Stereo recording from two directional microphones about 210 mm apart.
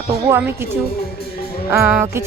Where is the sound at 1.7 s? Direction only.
10° right (ahead or behind).